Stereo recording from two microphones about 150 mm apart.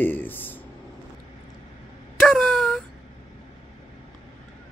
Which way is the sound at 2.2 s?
Centre (ahead or behind).